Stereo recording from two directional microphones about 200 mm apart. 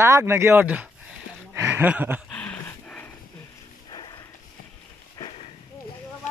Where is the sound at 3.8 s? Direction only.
20° left (ahead or behind).